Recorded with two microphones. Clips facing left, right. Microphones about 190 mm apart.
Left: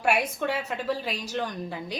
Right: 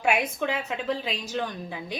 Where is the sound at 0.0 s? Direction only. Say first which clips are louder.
Even; 5° left (ahead or behind).